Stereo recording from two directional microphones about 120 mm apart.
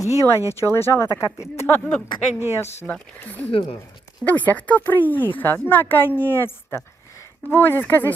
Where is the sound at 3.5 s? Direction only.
50° left (ahead or behind).